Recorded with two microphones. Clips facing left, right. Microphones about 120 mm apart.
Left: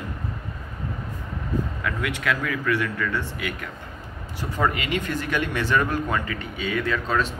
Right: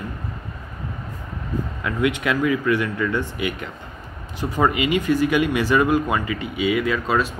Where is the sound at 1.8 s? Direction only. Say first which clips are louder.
Right 6 dB; 20° right (ahead or behind).